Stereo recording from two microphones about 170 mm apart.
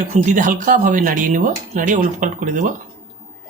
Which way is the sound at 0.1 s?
45° right (ahead or behind).